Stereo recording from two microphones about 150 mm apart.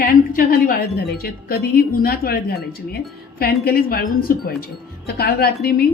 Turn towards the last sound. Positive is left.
turn(degrees=90)